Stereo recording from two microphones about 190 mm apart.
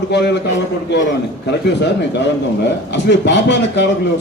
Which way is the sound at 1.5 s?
65° left (ahead or behind).